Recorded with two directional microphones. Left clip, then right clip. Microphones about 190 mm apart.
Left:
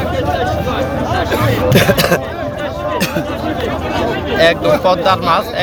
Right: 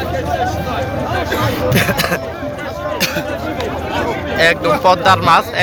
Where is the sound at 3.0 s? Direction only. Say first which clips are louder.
Right 1 dB; 50° left (ahead or behind).